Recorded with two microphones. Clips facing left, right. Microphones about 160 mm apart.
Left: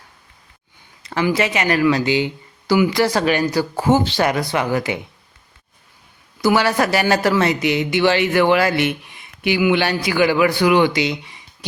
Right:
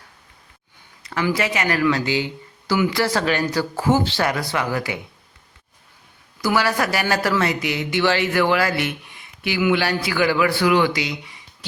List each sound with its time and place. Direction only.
1.0 s speech: 25° left (ahead or behind)
6.4 s speech: 25° left (ahead or behind)